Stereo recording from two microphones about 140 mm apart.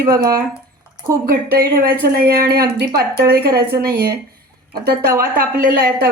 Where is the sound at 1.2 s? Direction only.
90° right.